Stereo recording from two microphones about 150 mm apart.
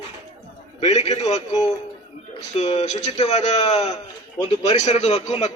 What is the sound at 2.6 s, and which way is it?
A man's voice, 45° left (ahead or behind).